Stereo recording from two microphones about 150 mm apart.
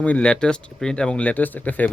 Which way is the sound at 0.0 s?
10° left (ahead or behind).